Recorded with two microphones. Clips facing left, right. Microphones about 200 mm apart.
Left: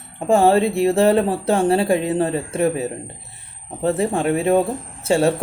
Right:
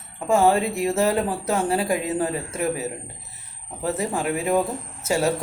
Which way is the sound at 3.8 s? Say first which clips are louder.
Left 6 dB; 30° left (ahead or behind).